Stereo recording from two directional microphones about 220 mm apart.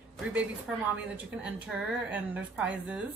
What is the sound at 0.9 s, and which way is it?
A woman's voice, 5° right (ahead or behind).